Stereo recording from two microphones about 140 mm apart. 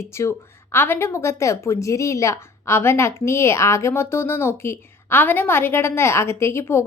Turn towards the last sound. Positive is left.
turn(degrees=20)  # may be behind; listen again after turning